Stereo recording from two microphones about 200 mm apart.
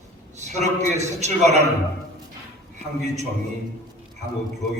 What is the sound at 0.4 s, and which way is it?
A man's voice, 35° right (ahead or behind).